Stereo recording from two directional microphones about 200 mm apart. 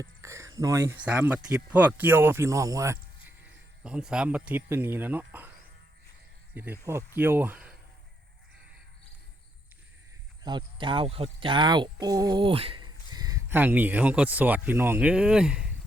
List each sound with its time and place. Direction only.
0.0 s speech: 15° right (ahead or behind)
6.5 s speech: 10° right (ahead or behind)
10.4 s speech: 25° right (ahead or behind); by 15.7 s 5° right (ahead or behind)